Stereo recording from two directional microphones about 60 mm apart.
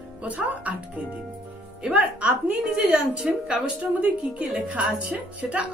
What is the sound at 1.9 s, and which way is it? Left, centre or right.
A woman's voice, right.